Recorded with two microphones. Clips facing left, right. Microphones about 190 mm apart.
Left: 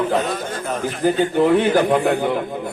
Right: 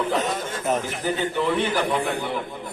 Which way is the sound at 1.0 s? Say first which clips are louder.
Left 8 dB; 50° left (ahead or behind).